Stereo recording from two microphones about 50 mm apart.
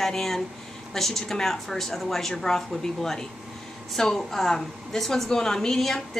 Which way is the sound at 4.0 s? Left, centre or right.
Centre.